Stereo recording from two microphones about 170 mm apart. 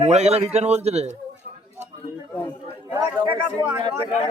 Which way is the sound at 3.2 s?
30° right (ahead or behind).